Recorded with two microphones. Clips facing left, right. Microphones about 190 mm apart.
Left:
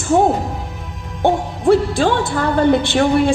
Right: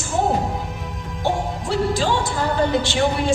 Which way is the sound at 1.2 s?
55° left (ahead or behind).